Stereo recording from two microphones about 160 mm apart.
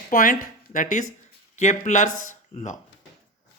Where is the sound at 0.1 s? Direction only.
55° left (ahead or behind).